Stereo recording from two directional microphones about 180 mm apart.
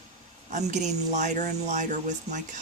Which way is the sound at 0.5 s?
40° right (ahead or behind).